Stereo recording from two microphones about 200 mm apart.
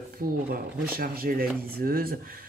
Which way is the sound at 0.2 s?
45° right (ahead or behind).